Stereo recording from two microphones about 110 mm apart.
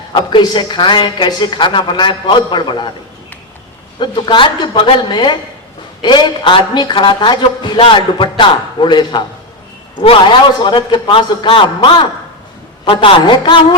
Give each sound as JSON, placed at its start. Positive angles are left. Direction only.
{"t": 0.1, "sound": "speech", "side_deg": 45}
{"t": 4.0, "sound": "speech", "side_deg": 50}
{"t": 10.6, "sound": "speech", "side_deg": 45}